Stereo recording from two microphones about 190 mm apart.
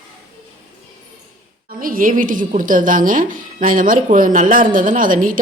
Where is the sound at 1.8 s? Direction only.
45° right (ahead or behind).